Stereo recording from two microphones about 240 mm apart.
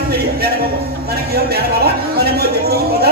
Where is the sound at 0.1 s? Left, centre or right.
Right.